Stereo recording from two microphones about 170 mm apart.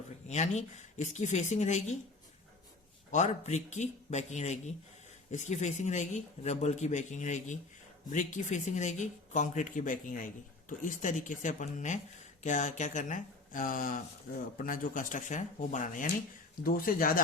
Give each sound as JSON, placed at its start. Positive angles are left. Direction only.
{"t": 0.3, "sound": "speech", "side_deg": 45}
{"t": 3.1, "sound": "speech", "side_deg": 45}